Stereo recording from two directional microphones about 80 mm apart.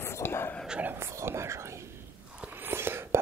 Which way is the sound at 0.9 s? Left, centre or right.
Right.